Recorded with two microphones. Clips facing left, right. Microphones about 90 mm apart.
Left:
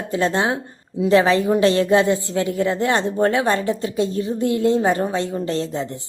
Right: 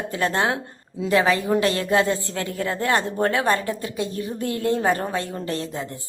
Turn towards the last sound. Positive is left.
turn(degrees=25)  # may be behind; listen again after turning